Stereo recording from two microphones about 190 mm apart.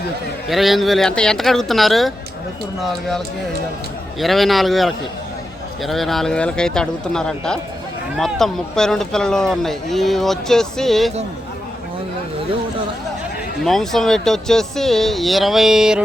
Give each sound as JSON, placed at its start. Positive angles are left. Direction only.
{"t": 0.4, "sound": "speech", "side_deg": 0}
{"t": 4.2, "sound": "speech", "side_deg": 0}
{"t": 13.7, "sound": "speech", "side_deg": 0}